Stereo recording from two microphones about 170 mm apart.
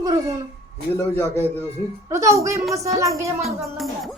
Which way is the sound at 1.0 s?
15° left (ahead or behind).